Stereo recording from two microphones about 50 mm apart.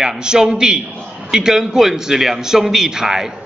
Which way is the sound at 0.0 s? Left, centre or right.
Centre.